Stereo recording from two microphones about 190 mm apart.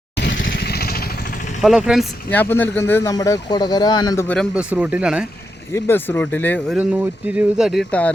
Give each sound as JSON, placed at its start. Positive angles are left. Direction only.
{"t": 0.2, "sound": "motorcycle", "side_deg": 75}
{"t": 0.5, "sound": "vehicle", "side_deg": 55}
{"t": 1.6, "sound": "speech", "side_deg": 0}
{"t": 2.3, "sound": "speech", "side_deg": 10}
{"t": 4.5, "sound": "speech", "side_deg": -10}
{"t": 5.7, "sound": "speech", "side_deg": 10}
{"t": 6.7, "sound": "speech", "side_deg": -5}